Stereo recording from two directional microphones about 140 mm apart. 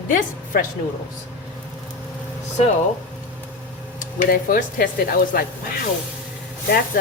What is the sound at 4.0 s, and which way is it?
Speech, 85° left.